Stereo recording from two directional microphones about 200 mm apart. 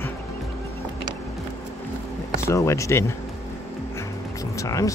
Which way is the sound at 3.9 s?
15° left (ahead or behind).